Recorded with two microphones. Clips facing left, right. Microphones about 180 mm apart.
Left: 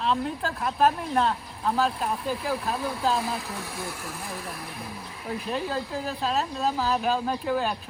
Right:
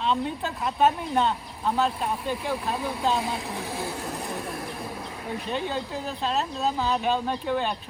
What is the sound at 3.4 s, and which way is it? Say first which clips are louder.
Speech: right 3 dB; 30° right (ahead or behind).